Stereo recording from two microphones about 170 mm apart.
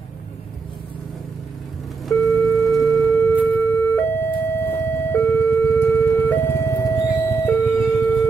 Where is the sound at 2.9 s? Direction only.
10° left (ahead or behind).